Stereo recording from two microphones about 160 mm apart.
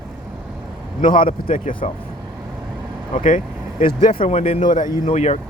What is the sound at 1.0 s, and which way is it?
Speech, 60° left (ahead or behind).